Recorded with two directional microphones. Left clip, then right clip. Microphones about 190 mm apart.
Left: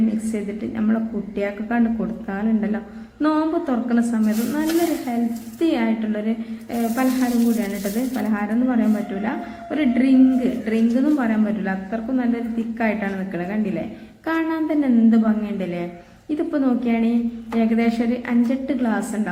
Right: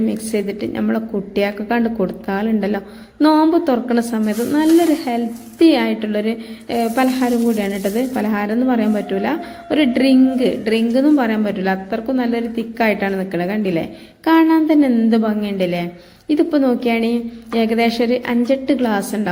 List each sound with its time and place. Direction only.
0.3 s a woman's voice: 30° right (ahead or behind)